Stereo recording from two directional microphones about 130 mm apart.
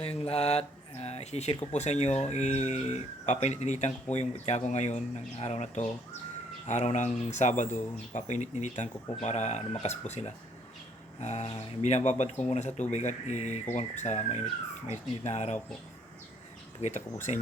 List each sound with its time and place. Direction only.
0.0 s speech: 55° left (ahead or behind)
16.8 s speech: 70° left (ahead or behind)